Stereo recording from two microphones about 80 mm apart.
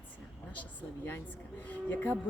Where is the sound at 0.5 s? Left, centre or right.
Left.